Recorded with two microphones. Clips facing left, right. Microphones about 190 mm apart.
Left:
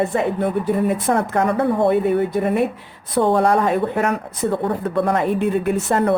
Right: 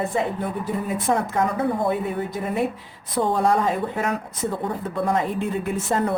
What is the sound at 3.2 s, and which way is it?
Speech, 65° left (ahead or behind).